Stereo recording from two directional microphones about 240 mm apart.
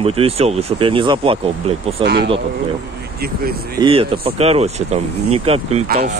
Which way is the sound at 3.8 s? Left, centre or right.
Right.